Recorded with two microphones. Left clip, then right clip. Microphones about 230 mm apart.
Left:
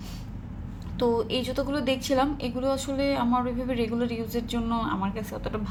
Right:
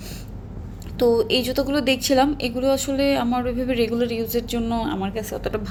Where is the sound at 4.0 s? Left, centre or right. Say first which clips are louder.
Right 7 dB; centre.